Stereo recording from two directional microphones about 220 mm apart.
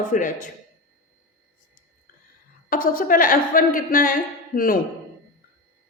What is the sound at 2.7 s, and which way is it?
A woman's voice, 40° left (ahead or behind).